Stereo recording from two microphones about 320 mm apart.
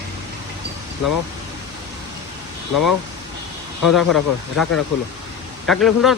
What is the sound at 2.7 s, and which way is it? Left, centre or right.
Speech, left.